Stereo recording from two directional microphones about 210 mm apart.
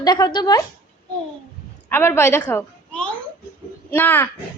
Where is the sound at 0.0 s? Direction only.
20° left (ahead or behind).